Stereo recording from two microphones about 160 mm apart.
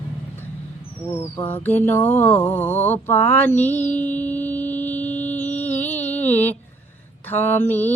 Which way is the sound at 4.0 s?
10° left (ahead or behind).